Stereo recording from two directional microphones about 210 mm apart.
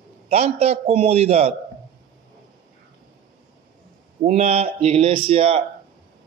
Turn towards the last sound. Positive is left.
turn(degrees=-25)  # may be behind; listen again after turning